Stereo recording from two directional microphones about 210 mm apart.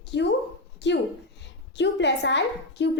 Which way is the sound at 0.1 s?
55° left (ahead or behind).